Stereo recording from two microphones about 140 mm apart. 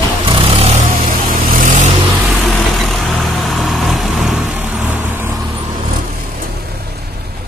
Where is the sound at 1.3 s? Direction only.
75° right (ahead or behind).